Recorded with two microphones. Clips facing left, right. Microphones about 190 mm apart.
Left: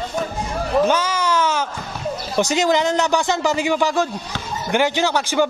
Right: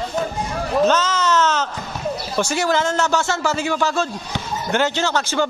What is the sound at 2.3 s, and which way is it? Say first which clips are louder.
Speech: left 3 dB; 15° left (ahead or behind).